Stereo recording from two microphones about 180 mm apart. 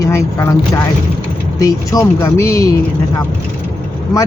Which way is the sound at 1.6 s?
20° left (ahead or behind).